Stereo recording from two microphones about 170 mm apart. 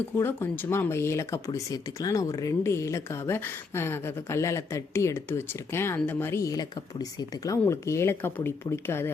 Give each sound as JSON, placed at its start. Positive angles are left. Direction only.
{"t": 0.2, "sound": "speech", "side_deg": 10}